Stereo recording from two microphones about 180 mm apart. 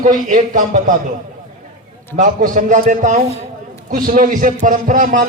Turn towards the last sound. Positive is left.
turn(degrees=-45)  # may be behind; listen again after turning